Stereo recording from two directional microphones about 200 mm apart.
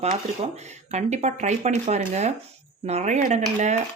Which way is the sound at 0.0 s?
35° right (ahead or behind).